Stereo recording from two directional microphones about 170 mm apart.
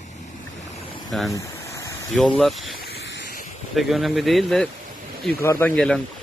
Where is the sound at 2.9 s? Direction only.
90° left.